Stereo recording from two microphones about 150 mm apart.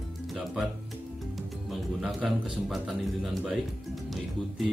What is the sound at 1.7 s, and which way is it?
Speech, centre (ahead or behind).